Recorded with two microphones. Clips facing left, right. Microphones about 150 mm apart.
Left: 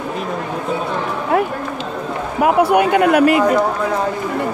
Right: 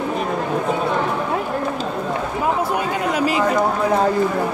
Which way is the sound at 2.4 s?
70° left (ahead or behind).